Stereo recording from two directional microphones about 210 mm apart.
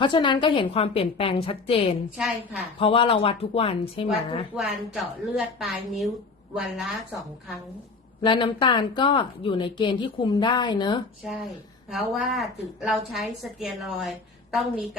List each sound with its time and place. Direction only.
0.0 s speech: 20° left (ahead or behind)
2.1 s a woman's voice: 5° right (ahead or behind)
2.7 s speech: 25° left (ahead or behind)
4.5 s a woman's voice: centre (ahead or behind)
8.2 s speech: 20° left (ahead or behind)
11.2 s a woman's voice: centre (ahead or behind)